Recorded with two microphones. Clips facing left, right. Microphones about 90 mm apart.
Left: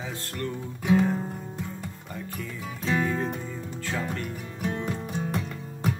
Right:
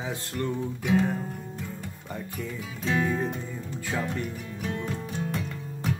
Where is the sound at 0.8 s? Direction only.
10° left (ahead or behind).